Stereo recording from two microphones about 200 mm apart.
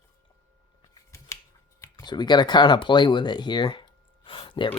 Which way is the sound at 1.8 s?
20° left (ahead or behind).